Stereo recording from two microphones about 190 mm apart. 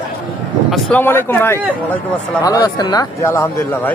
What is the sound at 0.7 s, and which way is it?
Speech, 10° left (ahead or behind).